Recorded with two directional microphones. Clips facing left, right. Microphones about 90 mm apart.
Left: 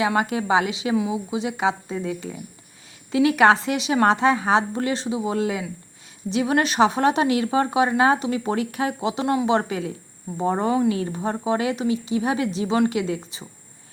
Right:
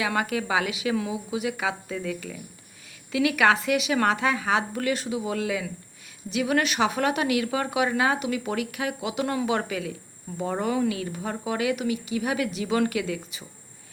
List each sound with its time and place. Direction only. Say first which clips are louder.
0.0 s a woman's voice: left 4 dB; 25° left (ahead or behind)